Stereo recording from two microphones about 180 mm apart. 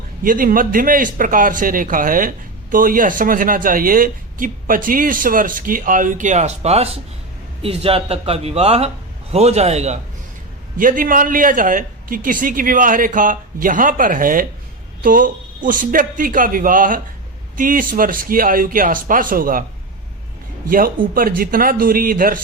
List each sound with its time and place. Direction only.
0.2 s a man's voice: 50° right (ahead or behind)
10.8 s a man's voice: 50° right (ahead or behind)
20.7 s a man's voice: 55° right (ahead or behind)